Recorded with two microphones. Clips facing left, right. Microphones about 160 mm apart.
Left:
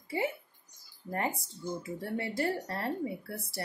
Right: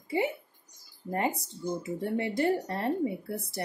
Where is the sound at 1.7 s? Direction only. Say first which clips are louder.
Right 5 dB; 20° right (ahead or behind).